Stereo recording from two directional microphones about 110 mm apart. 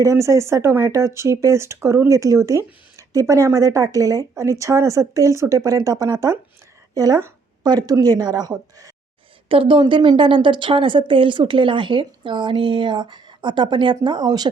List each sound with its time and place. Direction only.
0.0 s a woman's voice: 25° right (ahead or behind)
9.5 s a woman's voice: 55° right (ahead or behind)